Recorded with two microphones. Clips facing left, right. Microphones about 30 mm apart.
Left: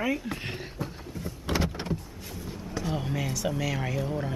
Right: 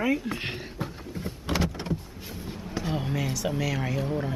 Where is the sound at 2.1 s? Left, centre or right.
Right.